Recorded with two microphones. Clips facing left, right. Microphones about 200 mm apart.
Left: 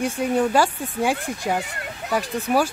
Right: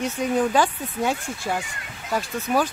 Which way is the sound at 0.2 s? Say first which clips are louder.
Left 1 dB; 10° left (ahead or behind).